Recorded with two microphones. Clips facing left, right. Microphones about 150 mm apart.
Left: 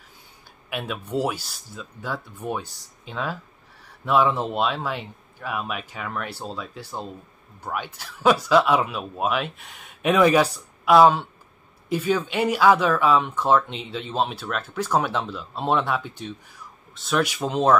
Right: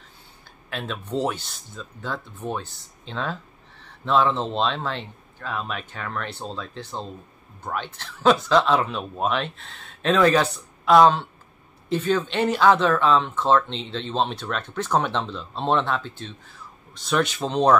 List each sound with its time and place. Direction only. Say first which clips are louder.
0.7 s speech: left 1 dB; 10° left (ahead or behind)
16.9 s speech: even; centre (ahead or behind)